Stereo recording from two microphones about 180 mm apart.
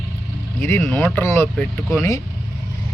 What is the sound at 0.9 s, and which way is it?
Speech, 10° left (ahead or behind).